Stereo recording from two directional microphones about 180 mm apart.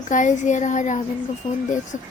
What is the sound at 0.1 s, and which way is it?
Speech, 45° left (ahead or behind).